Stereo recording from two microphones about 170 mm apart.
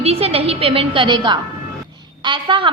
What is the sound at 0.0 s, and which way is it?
A woman's voice, 35° right (ahead or behind).